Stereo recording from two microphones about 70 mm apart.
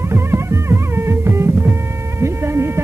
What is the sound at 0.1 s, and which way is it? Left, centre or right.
Music, right.